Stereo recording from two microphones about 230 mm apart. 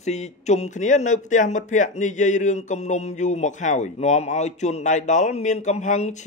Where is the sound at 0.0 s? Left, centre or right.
Left.